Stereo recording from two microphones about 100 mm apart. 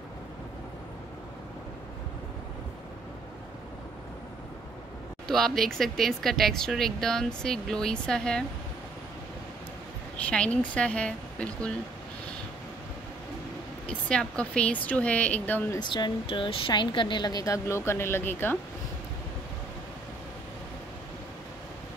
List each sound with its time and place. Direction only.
5.3 s speech: 5° left (ahead or behind)
10.1 s a woman's voice: 10° left (ahead or behind)
13.8 s a woman's voice: 10° left (ahead or behind)
15.8 s speech: 50° left (ahead or behind); by 18.6 s 20° left (ahead or behind)